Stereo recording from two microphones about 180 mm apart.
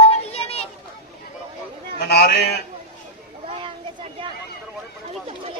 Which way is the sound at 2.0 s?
65° left (ahead or behind).